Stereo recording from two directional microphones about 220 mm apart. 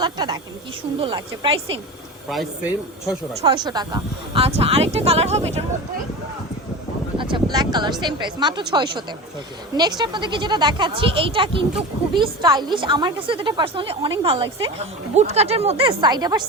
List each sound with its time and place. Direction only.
0.0 s speech: 20° right (ahead or behind)
2.3 s speech: centre (ahead or behind)
3.4 s speech: 20° right (ahead or behind)
7.2 s speech: 20° right (ahead or behind)